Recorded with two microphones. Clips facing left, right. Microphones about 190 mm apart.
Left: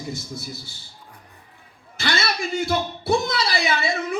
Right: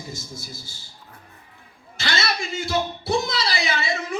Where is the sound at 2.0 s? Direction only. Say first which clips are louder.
Left 2 dB; 55° left (ahead or behind).